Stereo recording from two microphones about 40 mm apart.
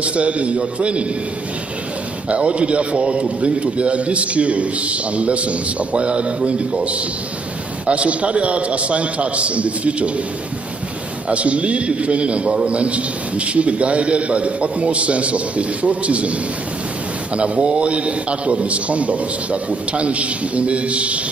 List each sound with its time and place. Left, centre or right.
0.0 s a man's voice: right
2.2 s a man's voice: right
7.8 s a man's voice: right
11.2 s a man's voice: right
17.4 s a man's voice: right